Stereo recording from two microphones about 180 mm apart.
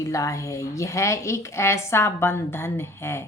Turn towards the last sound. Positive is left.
turn(degrees=15)  # may be behind; listen again after turning